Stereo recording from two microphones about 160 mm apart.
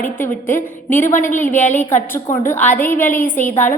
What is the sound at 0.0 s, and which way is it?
A woman's voice, 15° left (ahead or behind).